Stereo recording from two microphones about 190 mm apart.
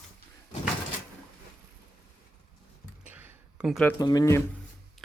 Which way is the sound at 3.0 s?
10° right (ahead or behind).